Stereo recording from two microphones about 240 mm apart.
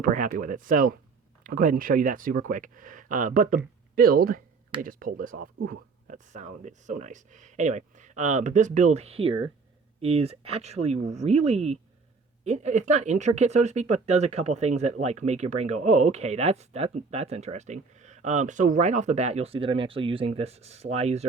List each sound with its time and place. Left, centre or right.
0.0 s speech: right